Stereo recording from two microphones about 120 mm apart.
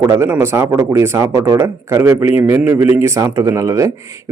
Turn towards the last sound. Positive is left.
turn(degrees=-25)  # may be behind; listen again after turning